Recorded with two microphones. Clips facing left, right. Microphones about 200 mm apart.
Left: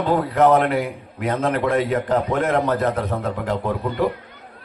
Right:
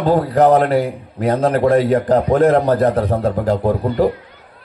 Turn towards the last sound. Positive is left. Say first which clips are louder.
# right 6 dB
turn(degrees=-35)  # may be behind; listen again after turning